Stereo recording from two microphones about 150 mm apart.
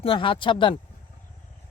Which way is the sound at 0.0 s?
35° left (ahead or behind).